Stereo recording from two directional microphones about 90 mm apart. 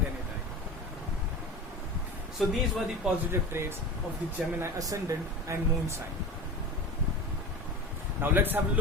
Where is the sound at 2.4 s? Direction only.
Centre (ahead or behind).